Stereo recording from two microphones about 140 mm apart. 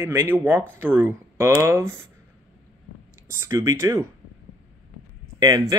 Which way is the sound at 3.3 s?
20° right (ahead or behind).